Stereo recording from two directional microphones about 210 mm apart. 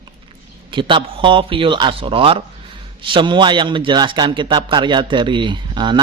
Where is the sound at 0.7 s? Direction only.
25° right (ahead or behind).